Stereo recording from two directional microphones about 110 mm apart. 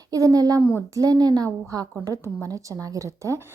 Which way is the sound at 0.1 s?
30° right (ahead or behind).